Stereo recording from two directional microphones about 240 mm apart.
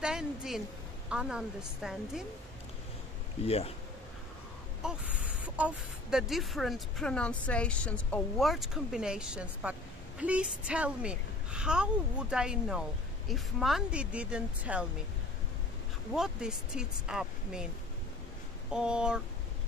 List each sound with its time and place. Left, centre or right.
0.0 s a woman's voice: centre
3.4 s speech: left
4.8 s speech: centre
16.1 s speech: centre
18.7 s speech: centre